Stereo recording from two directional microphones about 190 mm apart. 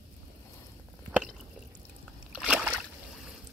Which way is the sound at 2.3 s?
5° right (ahead or behind).